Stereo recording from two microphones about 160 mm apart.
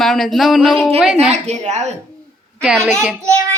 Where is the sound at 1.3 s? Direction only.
45° right (ahead or behind).